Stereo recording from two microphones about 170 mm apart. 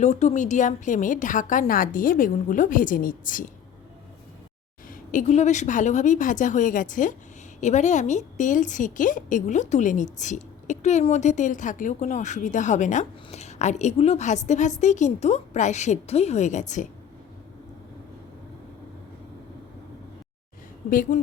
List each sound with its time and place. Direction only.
0.0 s a woman's voice: 45° left (ahead or behind)
4.9 s a woman's voice: 45° left (ahead or behind)
20.9 s speech: 55° left (ahead or behind)